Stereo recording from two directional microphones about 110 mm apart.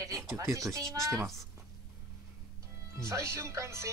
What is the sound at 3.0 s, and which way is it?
Speech, 25° right (ahead or behind).